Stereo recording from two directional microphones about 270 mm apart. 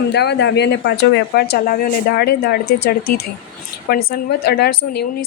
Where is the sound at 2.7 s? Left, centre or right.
Left.